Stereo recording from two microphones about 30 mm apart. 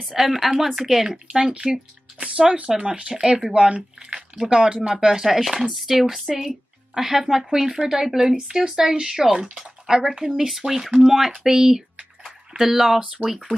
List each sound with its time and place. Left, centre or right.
0.2 s a woman's voice: centre
1.7 s speech: right
2.8 s speech: right
3.5 s speech: right
4.5 s speech: right
5.0 s a woman's voice: centre